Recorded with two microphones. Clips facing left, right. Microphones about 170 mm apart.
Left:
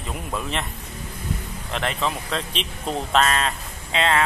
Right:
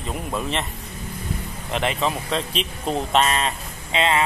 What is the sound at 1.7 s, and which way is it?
Speech, 5° right (ahead or behind).